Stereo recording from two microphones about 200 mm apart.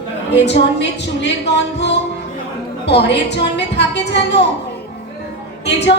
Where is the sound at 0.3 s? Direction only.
60° left (ahead or behind).